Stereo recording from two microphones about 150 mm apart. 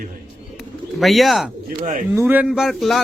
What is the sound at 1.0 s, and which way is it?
Speech, centre (ahead or behind).